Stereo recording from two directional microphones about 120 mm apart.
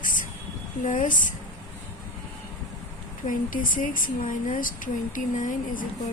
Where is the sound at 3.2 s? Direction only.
90° left.